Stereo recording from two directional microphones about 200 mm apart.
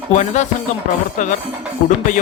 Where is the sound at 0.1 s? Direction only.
35° left (ahead or behind).